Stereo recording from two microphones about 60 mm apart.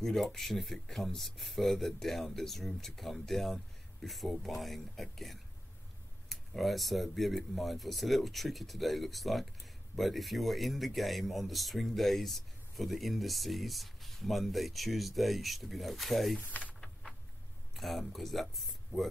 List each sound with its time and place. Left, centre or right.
0.0 s speech: centre
16.4 s speech: left
17.7 s speech: centre